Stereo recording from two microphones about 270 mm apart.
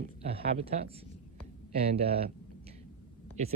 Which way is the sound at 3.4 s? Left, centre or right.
Right.